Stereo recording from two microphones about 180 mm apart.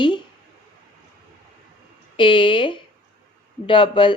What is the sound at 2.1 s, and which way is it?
Speech, 25° left (ahead or behind).